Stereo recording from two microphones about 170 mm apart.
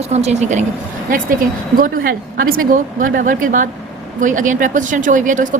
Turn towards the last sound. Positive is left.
turn(degrees=-50)  # may be behind; listen again after turning